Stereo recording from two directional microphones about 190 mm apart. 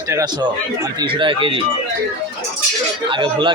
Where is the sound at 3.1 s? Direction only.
25° right (ahead or behind).